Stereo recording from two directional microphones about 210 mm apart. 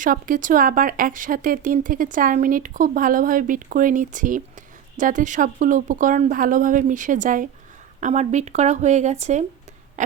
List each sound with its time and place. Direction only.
0.0 s speech: 40° right (ahead or behind)